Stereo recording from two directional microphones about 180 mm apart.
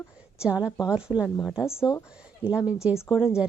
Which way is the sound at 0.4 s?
5° right (ahead or behind).